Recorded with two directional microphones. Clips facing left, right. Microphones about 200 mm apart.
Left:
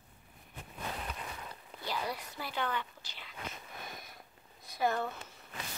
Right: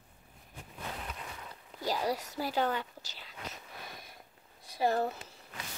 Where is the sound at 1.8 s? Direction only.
40° right (ahead or behind).